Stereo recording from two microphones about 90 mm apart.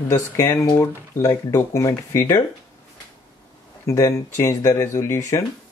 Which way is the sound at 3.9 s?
35° left (ahead or behind).